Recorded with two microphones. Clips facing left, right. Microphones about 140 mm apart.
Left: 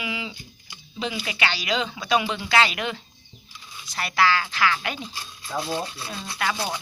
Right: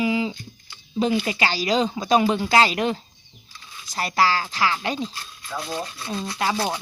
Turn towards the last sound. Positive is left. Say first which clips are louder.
# right 3 dB
turn(degrees=-30)  # may be behind; listen again after turning